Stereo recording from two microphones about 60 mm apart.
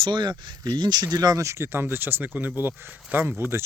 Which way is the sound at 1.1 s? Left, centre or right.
Right.